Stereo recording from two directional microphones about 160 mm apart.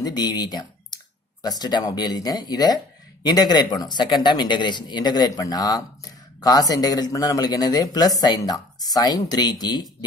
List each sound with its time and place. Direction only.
0.0 s speech: 25° left (ahead or behind)